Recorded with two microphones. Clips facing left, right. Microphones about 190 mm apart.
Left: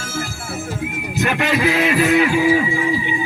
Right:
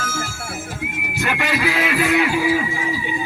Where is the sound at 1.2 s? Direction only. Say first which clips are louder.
Left 4 dB; 20° left (ahead or behind).